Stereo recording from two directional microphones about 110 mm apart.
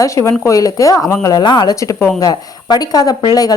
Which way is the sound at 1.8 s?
30° left (ahead or behind).